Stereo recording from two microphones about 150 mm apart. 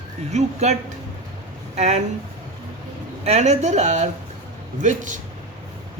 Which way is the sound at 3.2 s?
50° right (ahead or behind).